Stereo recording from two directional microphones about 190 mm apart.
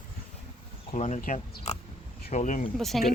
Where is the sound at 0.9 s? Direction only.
40° left (ahead or behind).